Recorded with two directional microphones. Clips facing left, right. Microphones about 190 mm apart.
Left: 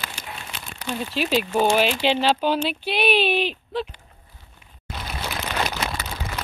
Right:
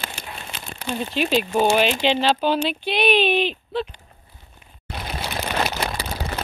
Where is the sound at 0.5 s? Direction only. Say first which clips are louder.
Right 2 dB; 30° right (ahead or behind).